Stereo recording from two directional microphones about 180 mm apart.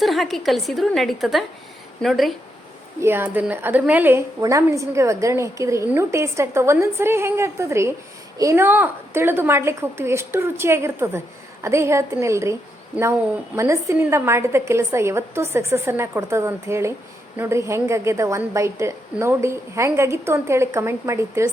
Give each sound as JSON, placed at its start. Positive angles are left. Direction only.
{"t": 0.0, "sound": "a woman's voice", "side_deg": 0}
{"t": 3.0, "sound": "a woman's voice", "side_deg": -10}
{"t": 13.6, "sound": "a woman's voice", "side_deg": -15}